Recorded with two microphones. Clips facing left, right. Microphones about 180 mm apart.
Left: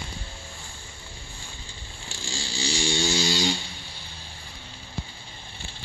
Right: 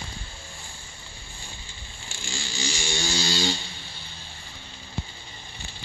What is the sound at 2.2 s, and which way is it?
Vehicle, 35° left (ahead or behind).